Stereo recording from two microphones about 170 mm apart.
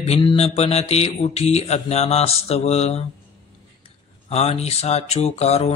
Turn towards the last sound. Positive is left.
turn(degrees=40)  # may be behind; listen again after turning